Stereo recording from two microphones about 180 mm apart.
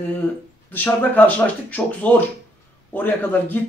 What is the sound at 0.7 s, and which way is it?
A man's voice, 10° left (ahead or behind).